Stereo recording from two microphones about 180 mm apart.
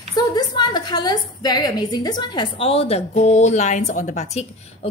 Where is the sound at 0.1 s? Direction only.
25° left (ahead or behind).